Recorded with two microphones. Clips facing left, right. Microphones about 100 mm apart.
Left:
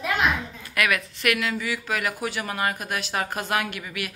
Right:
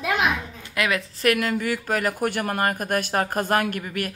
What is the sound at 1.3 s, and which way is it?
Speech, 45° right (ahead or behind).